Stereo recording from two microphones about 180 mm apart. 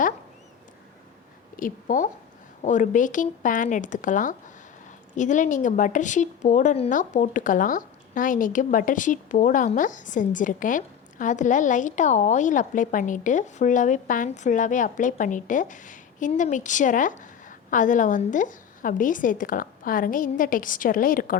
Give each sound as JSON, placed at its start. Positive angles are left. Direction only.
{"t": 1.5, "sound": "speech", "side_deg": 45}